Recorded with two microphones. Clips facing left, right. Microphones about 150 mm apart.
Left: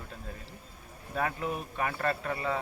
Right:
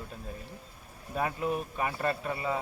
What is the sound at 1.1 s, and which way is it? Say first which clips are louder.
Speech: right 2 dB; 15° right (ahead or behind).